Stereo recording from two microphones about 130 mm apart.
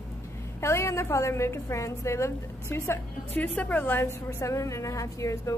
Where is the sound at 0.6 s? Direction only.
20° left (ahead or behind).